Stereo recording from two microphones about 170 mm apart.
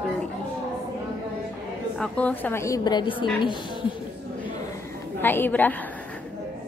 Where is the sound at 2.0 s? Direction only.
10° left (ahead or behind); by 3.3 s 30° left (ahead or behind).